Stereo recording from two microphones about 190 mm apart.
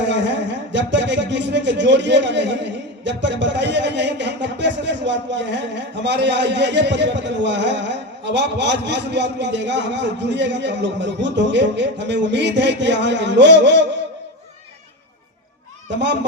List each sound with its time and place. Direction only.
0.0 s speech: 65° right (ahead or behind)